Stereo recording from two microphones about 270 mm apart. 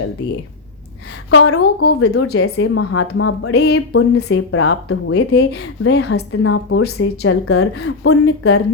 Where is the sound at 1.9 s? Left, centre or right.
Left.